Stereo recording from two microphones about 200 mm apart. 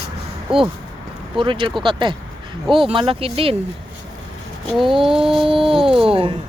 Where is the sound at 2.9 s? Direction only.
25° right (ahead or behind).